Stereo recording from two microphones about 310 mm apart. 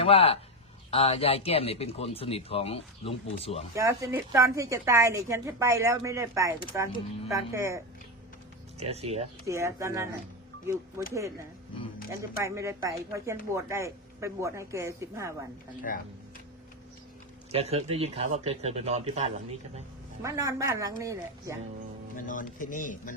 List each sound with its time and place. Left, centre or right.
0.0 s speech: centre
3.8 s a woman's voice: centre
8.8 s a woman's voice: centre
12.4 s a woman's voice: centre
15.9 s speech: left
17.5 s a woman's voice: centre
22.1 s speech: left